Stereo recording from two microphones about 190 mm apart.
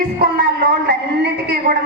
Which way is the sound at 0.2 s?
60° right (ahead or behind).